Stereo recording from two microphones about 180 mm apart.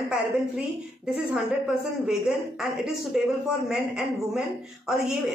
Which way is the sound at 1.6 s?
5° right (ahead or behind).